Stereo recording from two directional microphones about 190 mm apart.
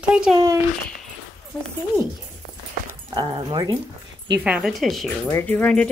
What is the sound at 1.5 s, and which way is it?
Speech, 5° left (ahead or behind).